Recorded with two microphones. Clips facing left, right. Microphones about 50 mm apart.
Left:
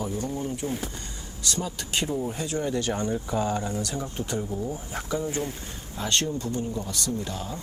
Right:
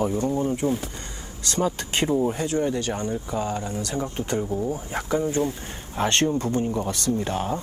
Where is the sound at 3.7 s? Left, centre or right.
Right.